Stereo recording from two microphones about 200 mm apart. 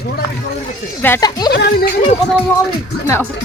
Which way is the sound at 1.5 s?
55° left (ahead or behind).